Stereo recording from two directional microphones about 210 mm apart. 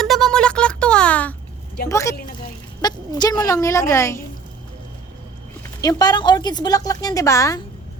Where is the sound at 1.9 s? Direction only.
15° left (ahead or behind).